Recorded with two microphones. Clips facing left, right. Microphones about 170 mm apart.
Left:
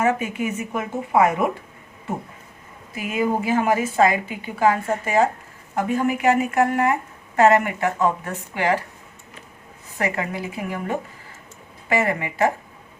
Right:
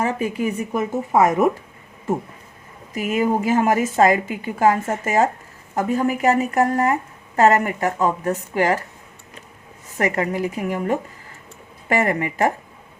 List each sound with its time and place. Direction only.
0.0 s a woman's voice: 35° right (ahead or behind)
2.9 s a woman's voice: 45° right (ahead or behind)
9.9 s a woman's voice: 40° right (ahead or behind)